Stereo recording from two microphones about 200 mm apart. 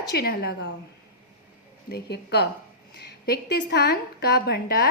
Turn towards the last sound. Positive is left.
turn(degrees=55)  # may be behind; listen again after turning